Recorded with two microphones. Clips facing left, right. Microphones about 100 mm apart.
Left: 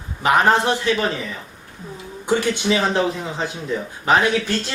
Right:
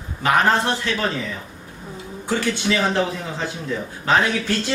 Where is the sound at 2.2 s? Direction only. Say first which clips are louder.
Left 3 dB; 15° left (ahead or behind).